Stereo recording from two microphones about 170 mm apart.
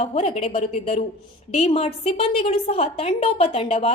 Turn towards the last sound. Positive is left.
turn(degrees=35)  # may be behind; listen again after turning